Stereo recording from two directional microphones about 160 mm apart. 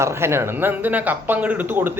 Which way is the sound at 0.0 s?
15° right (ahead or behind).